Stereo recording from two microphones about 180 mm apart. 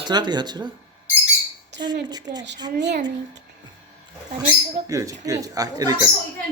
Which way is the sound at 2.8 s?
70° right (ahead or behind).